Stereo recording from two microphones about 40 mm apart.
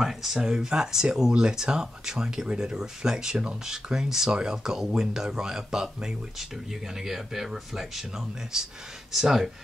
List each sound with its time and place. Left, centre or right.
0.0 s speech: centre
0.4 s speech: centre
2.8 s speech: centre